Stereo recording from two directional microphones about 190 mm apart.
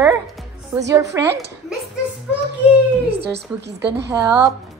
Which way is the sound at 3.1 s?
60° right (ahead or behind).